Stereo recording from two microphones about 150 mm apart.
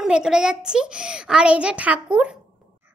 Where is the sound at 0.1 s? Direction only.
5° right (ahead or behind).